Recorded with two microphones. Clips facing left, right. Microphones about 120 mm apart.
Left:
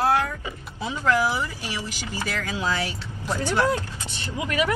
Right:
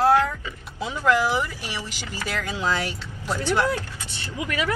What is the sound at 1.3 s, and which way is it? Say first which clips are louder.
Speech: right 2 dB; 15° right (ahead or behind).